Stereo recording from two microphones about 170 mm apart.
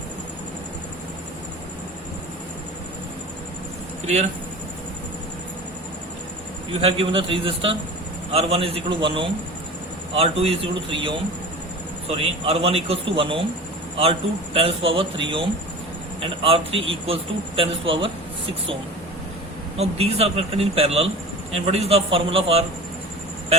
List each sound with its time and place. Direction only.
4.0 s speech: 40° right (ahead or behind)
6.8 s a man's voice: 30° right (ahead or behind)
19.7 s a man's voice: 35° right (ahead or behind)